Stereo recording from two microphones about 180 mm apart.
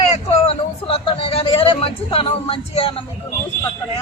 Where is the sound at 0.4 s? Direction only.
35° left (ahead or behind).